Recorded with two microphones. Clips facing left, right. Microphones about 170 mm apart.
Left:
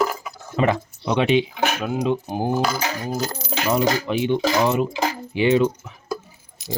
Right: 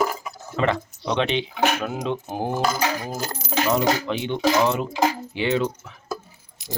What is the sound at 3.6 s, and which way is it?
Speech, 5° left (ahead or behind).